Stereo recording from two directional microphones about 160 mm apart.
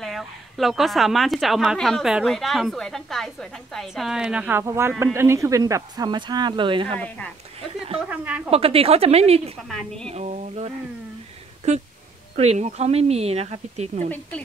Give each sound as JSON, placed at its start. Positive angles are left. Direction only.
{"t": 0.0, "sound": "a woman's voice", "side_deg": 0}
{"t": 7.0, "sound": "speech", "side_deg": 10}
{"t": 8.1, "sound": "a woman's voice", "side_deg": -5}
{"t": 8.5, "sound": "speech", "side_deg": -35}
{"t": 9.6, "sound": "a woman's voice", "side_deg": 0}
{"t": 10.0, "sound": "speech", "side_deg": -45}
{"t": 14.0, "sound": "speech", "side_deg": 10}